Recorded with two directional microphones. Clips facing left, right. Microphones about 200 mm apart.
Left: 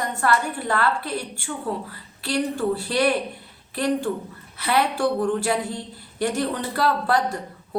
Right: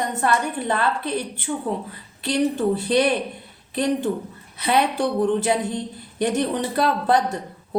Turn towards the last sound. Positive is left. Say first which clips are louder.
# right 2 dB
turn(degrees=-20)  # may be behind; listen again after turning